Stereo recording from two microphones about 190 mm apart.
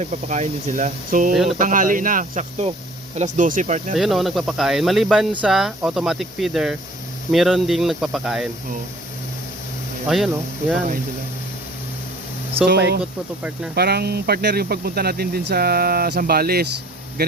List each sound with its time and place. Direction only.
0.0 s speech: 40° right (ahead or behind)
1.3 s speech: centre (ahead or behind)
1.5 s cricket: 45° right (ahead or behind)
3.2 s speech: 40° right (ahead or behind)
3.9 s speech: centre (ahead or behind)
12.6 s speech: 60° right (ahead or behind)
13.0 s speech: 5° right (ahead or behind)
13.7 s speech: 55° right (ahead or behind)